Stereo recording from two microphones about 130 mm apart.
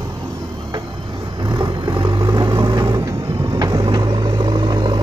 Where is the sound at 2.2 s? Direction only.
20° right (ahead or behind).